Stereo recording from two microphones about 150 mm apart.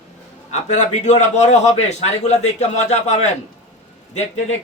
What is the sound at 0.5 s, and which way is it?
A man's voice, 50° left (ahead or behind).